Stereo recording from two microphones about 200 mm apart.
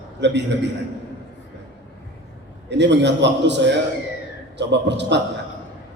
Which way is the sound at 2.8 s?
60° right (ahead or behind).